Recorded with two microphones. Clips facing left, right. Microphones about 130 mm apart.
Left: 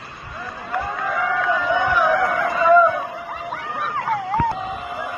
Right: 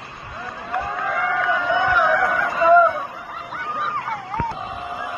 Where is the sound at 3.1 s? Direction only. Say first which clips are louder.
Left 4 dB; 65° left (ahead or behind); by 4.4 s 85° left.